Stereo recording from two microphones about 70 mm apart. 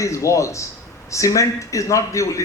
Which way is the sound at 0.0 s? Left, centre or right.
Left.